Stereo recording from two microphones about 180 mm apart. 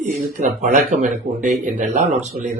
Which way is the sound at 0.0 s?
40° right (ahead or behind).